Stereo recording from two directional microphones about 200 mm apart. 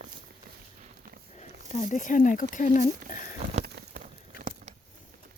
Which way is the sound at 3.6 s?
50° right (ahead or behind).